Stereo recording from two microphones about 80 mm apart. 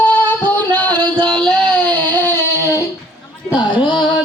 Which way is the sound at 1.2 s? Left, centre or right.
Centre.